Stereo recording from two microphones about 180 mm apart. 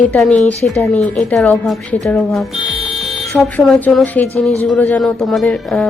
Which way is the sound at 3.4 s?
5° left (ahead or behind).